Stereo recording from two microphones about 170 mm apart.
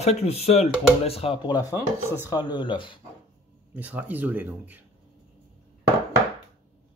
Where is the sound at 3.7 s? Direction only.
10° right (ahead or behind).